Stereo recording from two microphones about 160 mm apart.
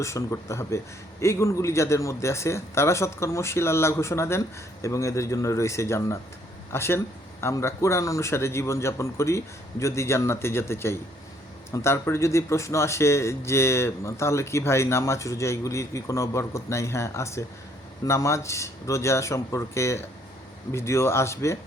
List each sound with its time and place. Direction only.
0.0 s a man's voice: 20° left (ahead or behind)